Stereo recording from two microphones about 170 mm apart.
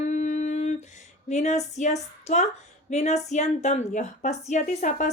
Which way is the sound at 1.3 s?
40° left (ahead or behind).